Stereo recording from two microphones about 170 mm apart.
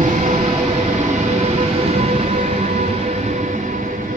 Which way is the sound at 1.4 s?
35° right (ahead or behind).